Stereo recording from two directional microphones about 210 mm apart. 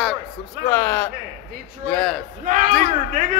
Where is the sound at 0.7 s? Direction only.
10° left (ahead or behind).